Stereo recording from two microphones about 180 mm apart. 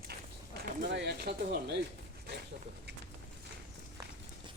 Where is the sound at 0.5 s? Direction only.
65° right (ahead or behind).